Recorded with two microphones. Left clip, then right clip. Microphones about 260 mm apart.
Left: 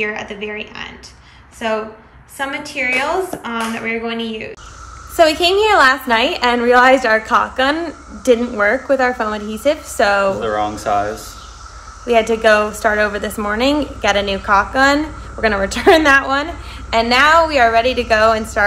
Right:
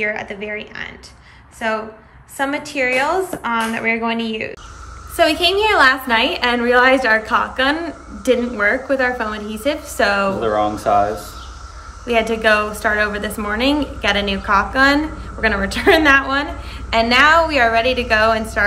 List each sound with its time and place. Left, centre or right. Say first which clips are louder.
0.5 s a woman's voice: even; centre
10.4 s speech: right 1 dB; centre
12.1 s a woman's voice: left 3 dB; centre